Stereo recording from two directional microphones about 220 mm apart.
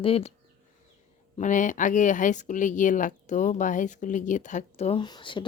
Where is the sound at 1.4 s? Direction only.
35° left (ahead or behind).